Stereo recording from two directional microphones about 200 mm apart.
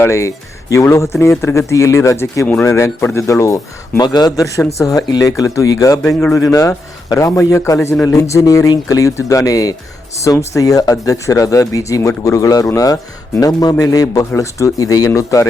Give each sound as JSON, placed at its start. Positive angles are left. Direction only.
{"t": 0.0, "sound": "speech", "side_deg": 15}